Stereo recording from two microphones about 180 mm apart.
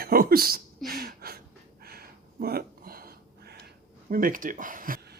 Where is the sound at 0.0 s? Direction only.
55° right (ahead or behind).